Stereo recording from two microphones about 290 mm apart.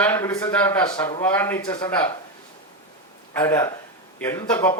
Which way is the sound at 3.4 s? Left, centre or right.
Centre.